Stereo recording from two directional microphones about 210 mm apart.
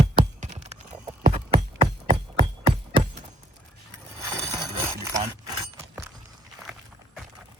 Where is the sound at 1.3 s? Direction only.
25° right (ahead or behind).